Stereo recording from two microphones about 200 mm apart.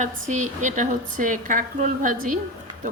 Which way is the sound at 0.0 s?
35° right (ahead or behind).